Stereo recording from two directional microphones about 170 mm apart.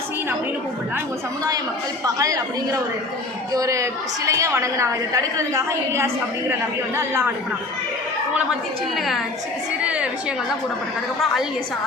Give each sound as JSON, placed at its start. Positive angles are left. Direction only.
{"t": 2.0, "sound": "a woman's voice", "side_deg": -20}
{"t": 9.0, "sound": "a woman's voice", "side_deg": 0}